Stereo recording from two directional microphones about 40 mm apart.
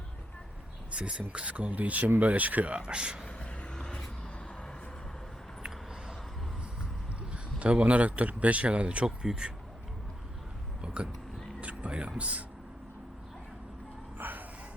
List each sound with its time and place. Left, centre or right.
0.9 s crow: right
1.3 s speech: right
3.2 s vehicle: left
5.6 s a sound: centre
7.3 s speech: right
9.0 s speech: centre
10.8 s a sound: right
11.6 s speech: right
14.2 s a sound: right